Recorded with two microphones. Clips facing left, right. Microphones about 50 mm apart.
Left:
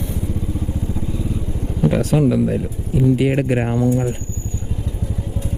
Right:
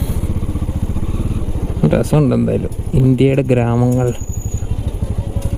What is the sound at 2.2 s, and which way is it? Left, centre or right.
Speech, right.